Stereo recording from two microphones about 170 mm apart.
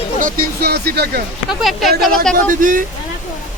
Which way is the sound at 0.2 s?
60° right (ahead or behind).